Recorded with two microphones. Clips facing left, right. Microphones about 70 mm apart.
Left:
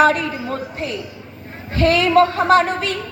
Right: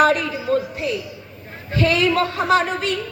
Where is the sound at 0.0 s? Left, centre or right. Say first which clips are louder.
Left 1 dB; left.